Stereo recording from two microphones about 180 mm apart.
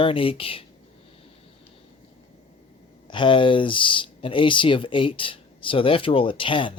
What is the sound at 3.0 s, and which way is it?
Speech, 25° left (ahead or behind).